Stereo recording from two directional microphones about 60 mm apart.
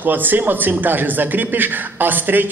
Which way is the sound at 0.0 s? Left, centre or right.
Right.